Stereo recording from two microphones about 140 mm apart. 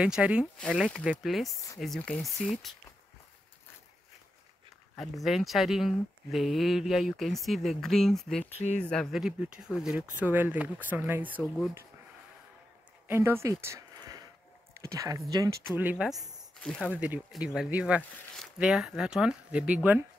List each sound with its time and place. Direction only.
0.0 s speech: 5° right (ahead or behind)
0.6 s speech: 5° left (ahead or behind)
4.9 s speech: centre (ahead or behind)
8.5 s speech: 55° left (ahead or behind)
8.8 s speech: 5° left (ahead or behind); by 11.3 s 15° right (ahead or behind)
11.3 s speech: 5° left (ahead or behind)
13.1 s speech: 15° right (ahead or behind)
15.7 s speech: 10° right (ahead or behind)